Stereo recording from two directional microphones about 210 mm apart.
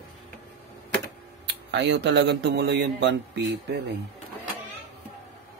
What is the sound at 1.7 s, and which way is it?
Speech, 55° right (ahead or behind).